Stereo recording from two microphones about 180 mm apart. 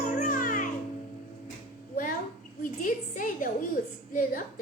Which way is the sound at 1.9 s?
50° left (ahead or behind).